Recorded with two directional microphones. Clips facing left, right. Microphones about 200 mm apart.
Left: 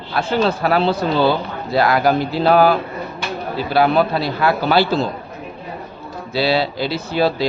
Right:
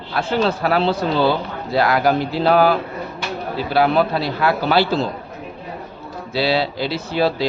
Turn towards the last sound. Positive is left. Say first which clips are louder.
# left 1 dB
turn(degrees=45)  # may be behind; listen again after turning